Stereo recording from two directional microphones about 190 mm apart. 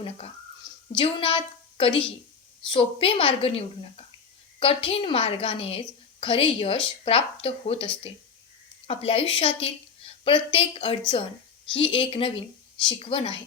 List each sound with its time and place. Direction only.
0.9 s a woman's voice: 25° left (ahead or behind)